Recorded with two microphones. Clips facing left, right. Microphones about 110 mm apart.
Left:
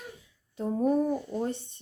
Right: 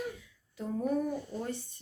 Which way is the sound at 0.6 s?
30° left (ahead or behind).